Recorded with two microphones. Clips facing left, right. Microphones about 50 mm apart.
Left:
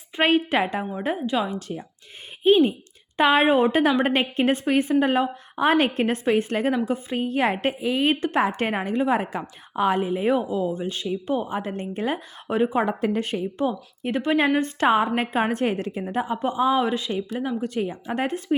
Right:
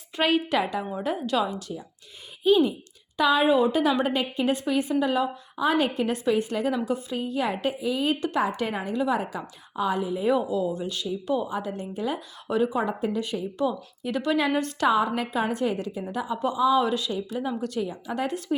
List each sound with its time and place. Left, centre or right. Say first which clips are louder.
0.2 s a woman's voice: left 3 dB; left
1.5 s a woman's voice: left 3 dB; left
8.1 s a woman's voice: left 3 dB; left
10.3 s a woman's voice: left 1 dB; left